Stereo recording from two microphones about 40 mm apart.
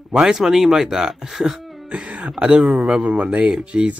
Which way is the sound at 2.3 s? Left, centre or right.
Right.